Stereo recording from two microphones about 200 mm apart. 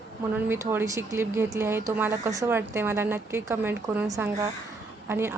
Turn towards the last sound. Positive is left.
turn(degrees=-10)  # may be behind; listen again after turning